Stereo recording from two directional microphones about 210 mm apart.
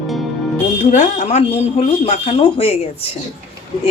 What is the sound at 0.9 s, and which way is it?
Speech, 35° left (ahead or behind).